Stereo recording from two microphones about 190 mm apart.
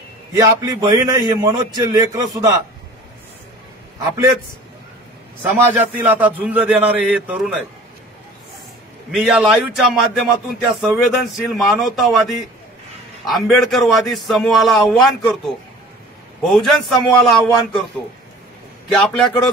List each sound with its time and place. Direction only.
0.4 s a man's voice: 20° right (ahead or behind)
5.4 s a man's voice: 10° right (ahead or behind)
9.1 s a man's voice: centre (ahead or behind)
16.4 s a man's voice: centre (ahead or behind)
18.9 s a man's voice: centre (ahead or behind)